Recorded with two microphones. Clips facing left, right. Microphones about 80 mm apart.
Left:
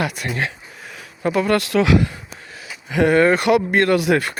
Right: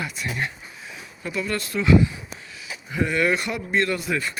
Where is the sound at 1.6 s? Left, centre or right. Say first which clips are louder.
Left 2 dB; left.